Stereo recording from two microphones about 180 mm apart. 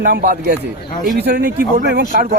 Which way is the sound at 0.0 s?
60° right (ahead or behind).